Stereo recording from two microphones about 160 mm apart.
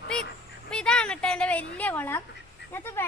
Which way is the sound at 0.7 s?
5° left (ahead or behind).